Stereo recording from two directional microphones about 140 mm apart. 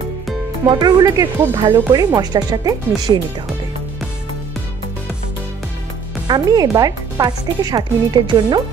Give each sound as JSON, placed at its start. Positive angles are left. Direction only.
{"t": 0.7, "sound": "speech", "side_deg": -30}
{"t": 6.2, "sound": "speech", "side_deg": -30}